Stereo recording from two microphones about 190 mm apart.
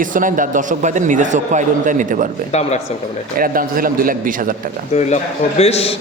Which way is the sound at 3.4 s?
50° right (ahead or behind).